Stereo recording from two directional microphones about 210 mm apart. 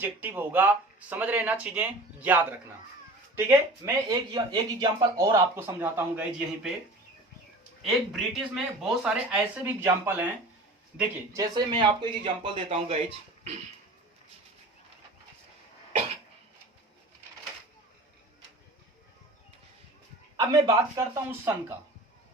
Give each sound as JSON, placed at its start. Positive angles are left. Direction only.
{"t": 0.0, "sound": "speech", "side_deg": -10}
{"t": 7.8, "sound": "speech", "side_deg": 0}
{"t": 11.5, "sound": "speech", "side_deg": -20}
{"t": 20.3, "sound": "speech", "side_deg": -20}